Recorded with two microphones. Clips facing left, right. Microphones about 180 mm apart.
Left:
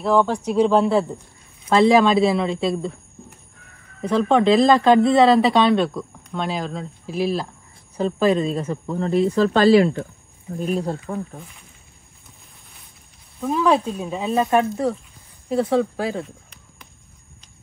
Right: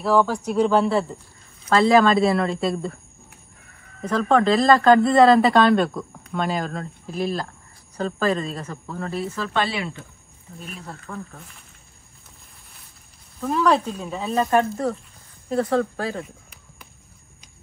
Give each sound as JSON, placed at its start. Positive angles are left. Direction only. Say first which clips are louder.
{"t": 0.0, "sound": "a woman's voice", "louder": "left 1 dB", "side_deg": -5}
{"t": 8.8, "sound": "speech", "louder": "left 8 dB", "side_deg": 20}
{"t": 9.3, "sound": "speech", "louder": "left 14 dB", "side_deg": 35}
{"t": 10.6, "sound": "speech", "louder": "left 14 dB", "side_deg": 35}
{"t": 13.4, "sound": "speech", "louder": "left 1 dB", "side_deg": 5}
{"t": 16.2, "sound": "a sound", "louder": "left 3 dB", "side_deg": -5}